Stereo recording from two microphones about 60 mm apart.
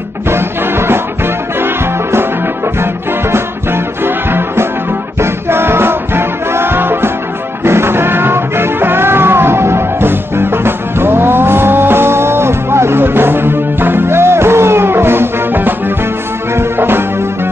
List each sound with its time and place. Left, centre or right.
0.3 s music: right
2.8 s music: right